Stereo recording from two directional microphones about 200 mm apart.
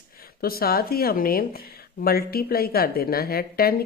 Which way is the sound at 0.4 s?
50° left (ahead or behind).